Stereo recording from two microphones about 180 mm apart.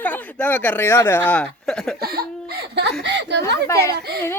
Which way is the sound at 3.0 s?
75° right (ahead or behind).